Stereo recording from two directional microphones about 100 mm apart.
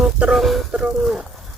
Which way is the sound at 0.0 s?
10° right (ahead or behind).